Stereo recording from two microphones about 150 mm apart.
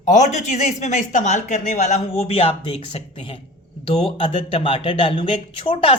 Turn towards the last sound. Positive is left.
turn(degrees=35)  # may be behind; listen again after turning